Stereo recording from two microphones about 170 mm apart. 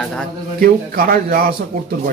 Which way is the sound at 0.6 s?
60° right (ahead or behind).